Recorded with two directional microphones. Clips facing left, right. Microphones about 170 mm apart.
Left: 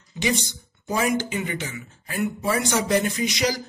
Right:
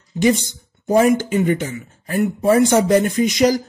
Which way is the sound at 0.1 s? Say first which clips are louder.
Right 9 dB; 45° right (ahead or behind).